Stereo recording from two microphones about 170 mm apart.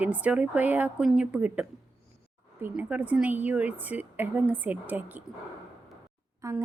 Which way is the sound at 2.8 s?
10° right (ahead or behind).